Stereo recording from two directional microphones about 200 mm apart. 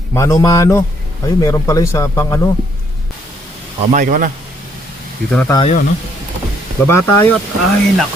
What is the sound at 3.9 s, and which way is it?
Speech, 40° right (ahead or behind).